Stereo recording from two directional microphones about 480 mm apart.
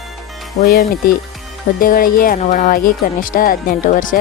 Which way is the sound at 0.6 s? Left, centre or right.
Centre.